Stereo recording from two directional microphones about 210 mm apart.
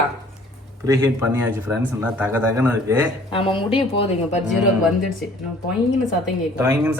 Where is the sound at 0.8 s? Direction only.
15° right (ahead or behind).